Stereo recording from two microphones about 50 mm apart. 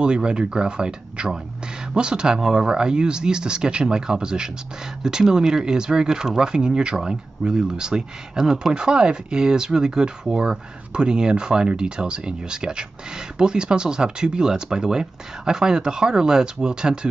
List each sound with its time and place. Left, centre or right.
0.0 s speech: centre